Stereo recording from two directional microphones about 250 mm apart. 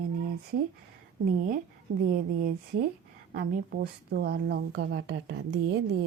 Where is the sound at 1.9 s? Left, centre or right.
Right.